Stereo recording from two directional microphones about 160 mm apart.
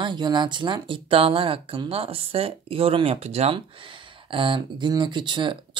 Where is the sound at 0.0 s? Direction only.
30° right (ahead or behind).